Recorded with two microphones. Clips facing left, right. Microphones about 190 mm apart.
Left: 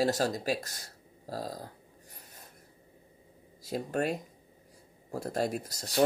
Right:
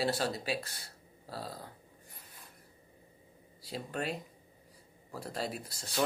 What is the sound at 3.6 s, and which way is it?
Speech, 45° left (ahead or behind).